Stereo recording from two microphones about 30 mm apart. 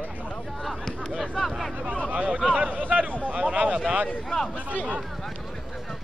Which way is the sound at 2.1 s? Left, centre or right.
Right.